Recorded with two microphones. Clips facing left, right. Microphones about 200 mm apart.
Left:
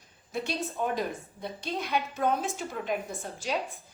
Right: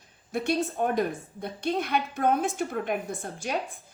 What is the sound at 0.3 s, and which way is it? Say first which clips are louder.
A woman's voice: right 6 dB; 55° right (ahead or behind).